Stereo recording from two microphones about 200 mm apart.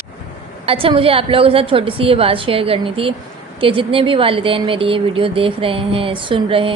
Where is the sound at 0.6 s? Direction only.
25° right (ahead or behind).